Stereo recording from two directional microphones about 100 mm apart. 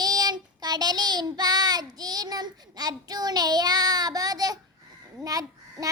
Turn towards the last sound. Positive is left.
turn(degrees=-35)  # may be behind; listen again after turning